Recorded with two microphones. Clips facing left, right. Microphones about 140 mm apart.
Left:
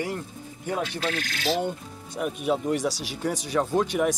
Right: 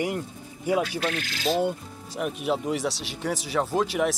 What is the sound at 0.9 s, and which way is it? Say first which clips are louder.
Speech: right 1 dB; 30° left (ahead or behind).